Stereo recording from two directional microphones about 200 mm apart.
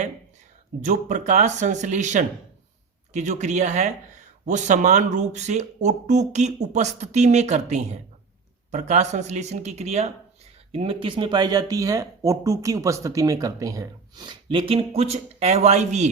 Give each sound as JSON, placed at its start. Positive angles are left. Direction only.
{"t": 0.9, "sound": "speech", "side_deg": -35}